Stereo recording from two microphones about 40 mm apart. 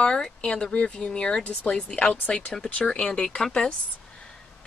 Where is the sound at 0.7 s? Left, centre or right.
Left.